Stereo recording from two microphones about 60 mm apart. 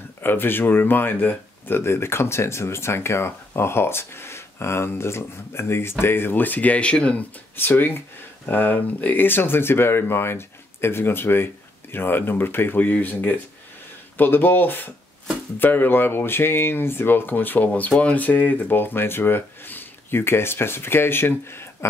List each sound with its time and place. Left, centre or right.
0.2 s speech: left; by 7.2 s centre
7.5 s speech: left